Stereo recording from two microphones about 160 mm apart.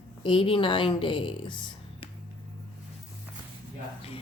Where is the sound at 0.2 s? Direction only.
35° left (ahead or behind).